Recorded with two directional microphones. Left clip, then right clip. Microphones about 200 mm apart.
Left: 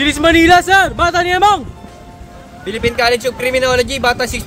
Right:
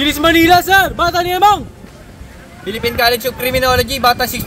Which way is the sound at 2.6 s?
10° left (ahead or behind).